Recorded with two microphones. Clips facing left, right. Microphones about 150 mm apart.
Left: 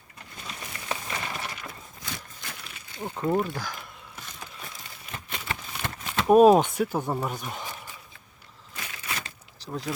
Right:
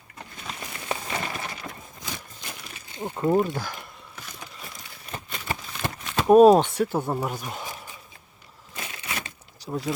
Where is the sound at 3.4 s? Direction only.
15° right (ahead or behind).